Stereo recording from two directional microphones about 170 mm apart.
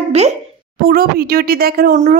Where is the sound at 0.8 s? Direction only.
60° right (ahead or behind).